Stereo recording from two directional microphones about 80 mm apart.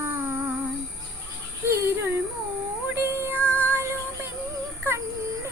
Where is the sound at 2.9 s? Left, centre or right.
Right.